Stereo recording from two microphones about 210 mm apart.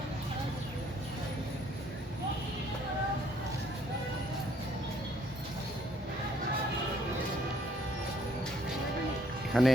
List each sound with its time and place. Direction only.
9.5 s speech: centre (ahead or behind)